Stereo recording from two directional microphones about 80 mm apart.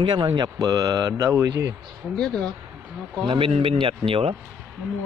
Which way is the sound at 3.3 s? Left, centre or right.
Right.